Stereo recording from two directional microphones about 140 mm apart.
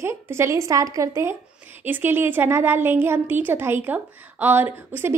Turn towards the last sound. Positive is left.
turn(degrees=-15)  # may be behind; listen again after turning